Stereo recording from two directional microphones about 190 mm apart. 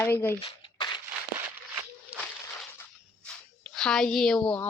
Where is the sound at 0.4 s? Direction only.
25° left (ahead or behind).